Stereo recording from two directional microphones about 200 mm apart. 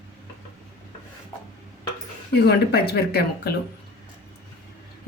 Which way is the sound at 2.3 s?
55° left (ahead or behind).